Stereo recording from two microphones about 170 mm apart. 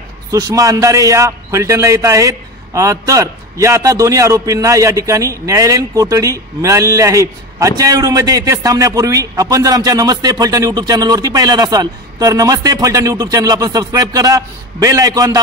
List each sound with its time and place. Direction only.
0.3 s a man's voice: 20° right (ahead or behind)